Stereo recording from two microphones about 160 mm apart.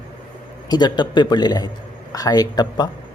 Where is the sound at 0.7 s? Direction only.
25° left (ahead or behind).